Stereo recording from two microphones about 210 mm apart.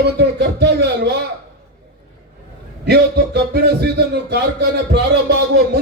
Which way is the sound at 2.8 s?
50° right (ahead or behind).